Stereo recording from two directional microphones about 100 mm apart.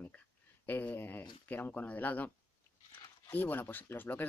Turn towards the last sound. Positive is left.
turn(degrees=20)  # may be behind; listen again after turning